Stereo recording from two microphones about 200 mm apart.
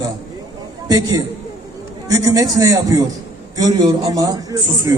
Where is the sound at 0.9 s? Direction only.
15° right (ahead or behind).